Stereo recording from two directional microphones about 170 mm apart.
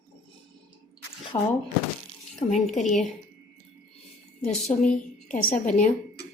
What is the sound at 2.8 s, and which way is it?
Speech, centre (ahead or behind).